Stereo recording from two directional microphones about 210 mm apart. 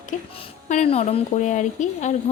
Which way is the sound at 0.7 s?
30° left (ahead or behind).